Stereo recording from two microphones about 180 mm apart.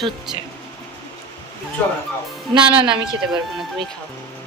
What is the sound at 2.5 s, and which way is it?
Speech, 30° right (ahead or behind).